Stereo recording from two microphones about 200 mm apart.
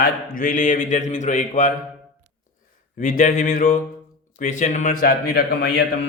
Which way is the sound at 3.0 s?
40° left (ahead or behind).